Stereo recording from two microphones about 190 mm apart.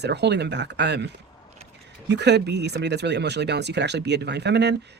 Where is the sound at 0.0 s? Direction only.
65° right (ahead or behind).